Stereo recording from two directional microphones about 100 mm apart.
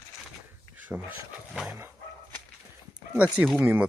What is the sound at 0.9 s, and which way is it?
Speech, 10° right (ahead or behind).